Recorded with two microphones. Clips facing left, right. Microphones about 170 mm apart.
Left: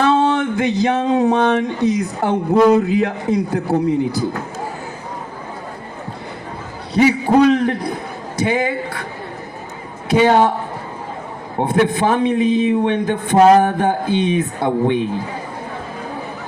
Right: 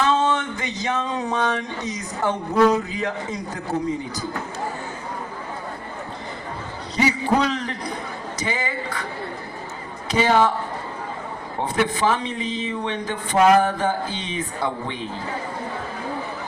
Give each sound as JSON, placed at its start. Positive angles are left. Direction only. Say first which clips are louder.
{"t": 0.0, "sound": "a man's voice", "louder": "left 5 dB", "side_deg": 60}
{"t": 6.9, "sound": "a man's voice", "louder": "left 7 dB", "side_deg": 55}
{"t": 10.1, "sound": "a man's voice", "louder": "left 6 dB", "side_deg": 60}
{"t": 11.7, "sound": "a man's voice", "louder": "left 5 dB", "side_deg": 60}
{"t": 13.3, "sound": "music", "louder": "left 5 dB", "side_deg": 35}
{"t": 13.7, "sound": "a man's voice", "louder": "left 6 dB", "side_deg": 60}